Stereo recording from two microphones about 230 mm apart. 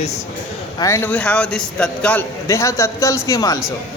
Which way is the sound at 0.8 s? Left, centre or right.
Centre.